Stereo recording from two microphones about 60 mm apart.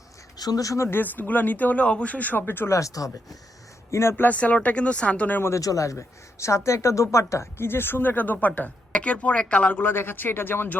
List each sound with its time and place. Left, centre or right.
0.3 s speech: left
0.8 s speech: left
2.6 s speech: left
4.2 s speech: left
5.5 s speech: left
9.8 s speech: left